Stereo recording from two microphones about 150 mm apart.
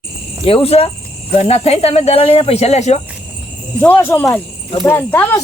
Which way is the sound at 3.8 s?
15° left (ahead or behind).